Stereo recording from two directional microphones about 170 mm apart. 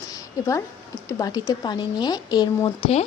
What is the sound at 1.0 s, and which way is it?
Speech, 20° left (ahead or behind).